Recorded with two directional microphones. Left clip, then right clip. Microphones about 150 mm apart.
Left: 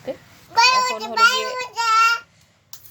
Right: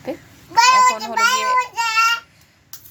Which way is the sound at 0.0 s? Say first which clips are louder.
Right 2 dB; centre (ahead or behind).